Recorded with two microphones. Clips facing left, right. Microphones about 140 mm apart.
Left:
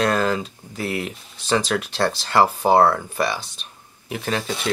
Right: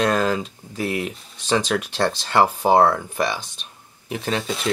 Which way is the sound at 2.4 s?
10° right (ahead or behind).